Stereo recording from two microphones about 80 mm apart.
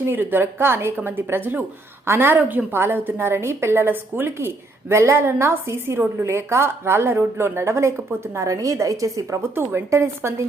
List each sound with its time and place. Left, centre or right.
0.0 s a woman's voice: right
9.6 s speech: right